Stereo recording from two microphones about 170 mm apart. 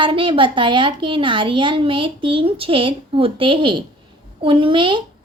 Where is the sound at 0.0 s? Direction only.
30° right (ahead or behind).